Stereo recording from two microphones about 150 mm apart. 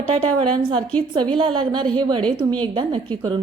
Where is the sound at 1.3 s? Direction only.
35° right (ahead or behind).